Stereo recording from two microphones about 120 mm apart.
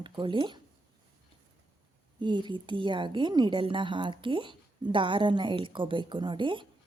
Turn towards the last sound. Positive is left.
turn(degrees=-45)  # may be behind; listen again after turning